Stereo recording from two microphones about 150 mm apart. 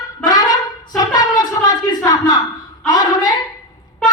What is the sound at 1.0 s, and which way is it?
Music, 25° left (ahead or behind).